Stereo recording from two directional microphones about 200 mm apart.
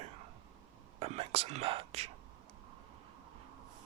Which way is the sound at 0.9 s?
30° right (ahead or behind).